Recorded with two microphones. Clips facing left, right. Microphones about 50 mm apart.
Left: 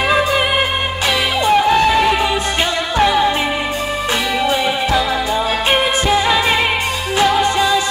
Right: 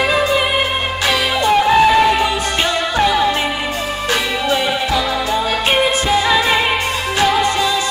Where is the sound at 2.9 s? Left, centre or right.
Centre.